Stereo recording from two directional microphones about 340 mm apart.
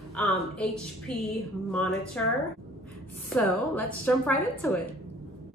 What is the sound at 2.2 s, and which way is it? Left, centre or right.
Speech, centre.